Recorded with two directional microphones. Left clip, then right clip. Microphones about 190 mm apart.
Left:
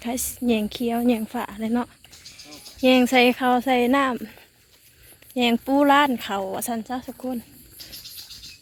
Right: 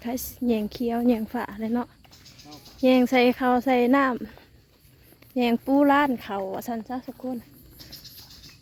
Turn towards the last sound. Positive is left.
turn(degrees=0)  # may be behind; listen again after turning